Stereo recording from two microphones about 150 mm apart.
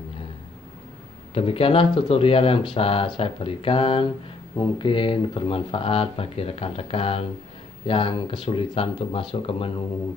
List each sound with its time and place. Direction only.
1.3 s speech: 40° left (ahead or behind)